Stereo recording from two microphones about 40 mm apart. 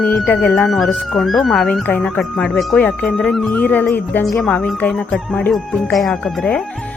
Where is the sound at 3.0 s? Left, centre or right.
Centre.